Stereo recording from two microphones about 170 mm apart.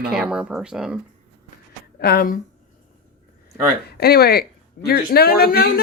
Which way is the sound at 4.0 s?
65° left (ahead or behind).